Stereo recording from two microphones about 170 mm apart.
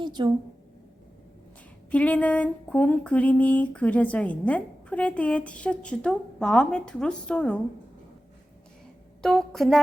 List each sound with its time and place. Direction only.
0.0 s a woman's voice: 25° right (ahead or behind)
1.9 s a sound: 10° left (ahead or behind)
9.2 s a woman's voice: 5° left (ahead or behind)